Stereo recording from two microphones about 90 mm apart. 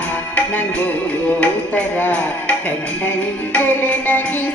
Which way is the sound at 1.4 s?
20° left (ahead or behind).